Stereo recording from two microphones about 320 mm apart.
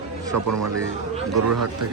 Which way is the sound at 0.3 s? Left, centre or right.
Right.